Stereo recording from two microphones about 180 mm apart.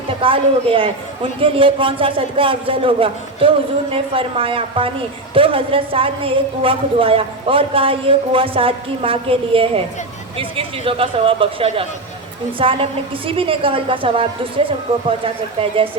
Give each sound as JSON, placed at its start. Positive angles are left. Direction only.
{"t": 0.2, "sound": "a woman's voice", "side_deg": -30}